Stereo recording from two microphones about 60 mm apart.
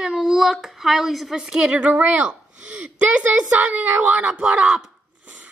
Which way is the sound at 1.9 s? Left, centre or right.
Right.